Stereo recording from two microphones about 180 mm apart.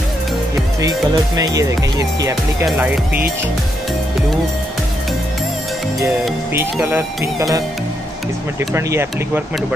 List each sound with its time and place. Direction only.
0.7 s speech: 20° right (ahead or behind)
6.5 s speech: 10° right (ahead or behind)
8.5 s speech: 15° right (ahead or behind)